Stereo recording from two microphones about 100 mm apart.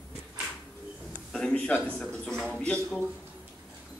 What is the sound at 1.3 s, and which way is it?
A man's voice, 5° left (ahead or behind).